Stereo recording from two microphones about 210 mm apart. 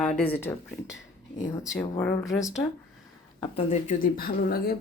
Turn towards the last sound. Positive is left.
turn(degrees=45)  # may be behind; listen again after turning